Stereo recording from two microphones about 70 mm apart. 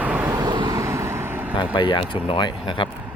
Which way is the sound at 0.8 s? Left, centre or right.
Right.